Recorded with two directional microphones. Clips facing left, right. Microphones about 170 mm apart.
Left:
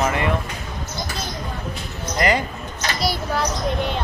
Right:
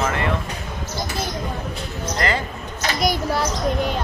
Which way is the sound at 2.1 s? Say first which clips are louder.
Left 3 dB; 15° left (ahead or behind).